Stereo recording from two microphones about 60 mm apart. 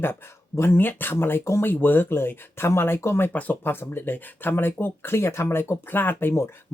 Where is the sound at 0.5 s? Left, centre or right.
Left.